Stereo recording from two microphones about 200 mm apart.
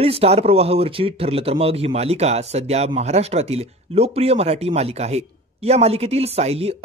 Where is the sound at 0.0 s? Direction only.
30° right (ahead or behind).